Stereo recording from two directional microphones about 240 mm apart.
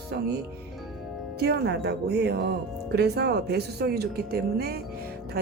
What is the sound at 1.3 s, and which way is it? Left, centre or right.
Speech, right.